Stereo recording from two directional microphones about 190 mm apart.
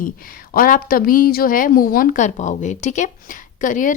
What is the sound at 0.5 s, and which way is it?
A woman's voice, 50° left (ahead or behind).